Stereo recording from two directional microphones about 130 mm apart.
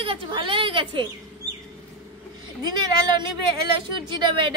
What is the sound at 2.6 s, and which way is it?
Speech, 35° right (ahead or behind).